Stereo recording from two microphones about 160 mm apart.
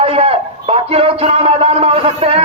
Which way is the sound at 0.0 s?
35° right (ahead or behind).